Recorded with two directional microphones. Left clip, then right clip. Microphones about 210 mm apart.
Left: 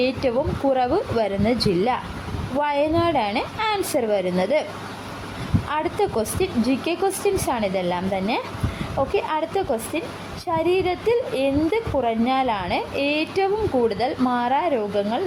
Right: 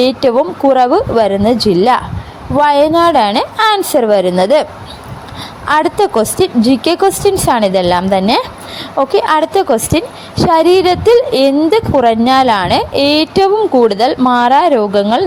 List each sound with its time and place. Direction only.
0.0 s a woman's voice: 30° right (ahead or behind)
5.6 s a woman's voice: 35° right (ahead or behind)